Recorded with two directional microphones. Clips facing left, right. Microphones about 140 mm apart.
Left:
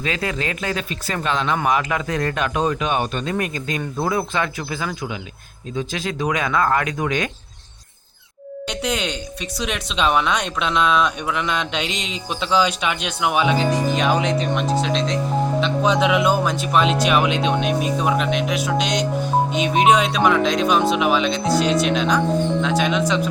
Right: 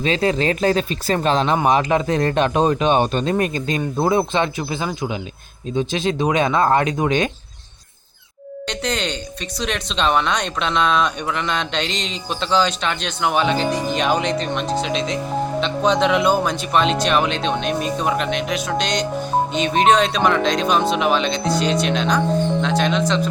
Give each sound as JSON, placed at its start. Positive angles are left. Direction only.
{"t": 0.0, "sound": "speech", "side_deg": -30}
{"t": 8.6, "sound": "speech", "side_deg": 5}